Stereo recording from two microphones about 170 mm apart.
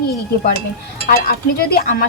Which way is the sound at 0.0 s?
65° left (ahead or behind).